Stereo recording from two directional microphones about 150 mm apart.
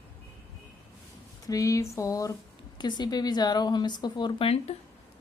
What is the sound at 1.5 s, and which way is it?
Speech, 20° left (ahead or behind).